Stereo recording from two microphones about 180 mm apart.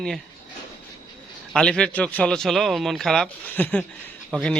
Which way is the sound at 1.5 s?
5° left (ahead or behind).